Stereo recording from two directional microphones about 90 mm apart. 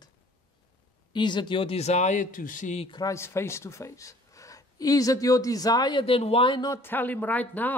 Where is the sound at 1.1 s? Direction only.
55° left (ahead or behind).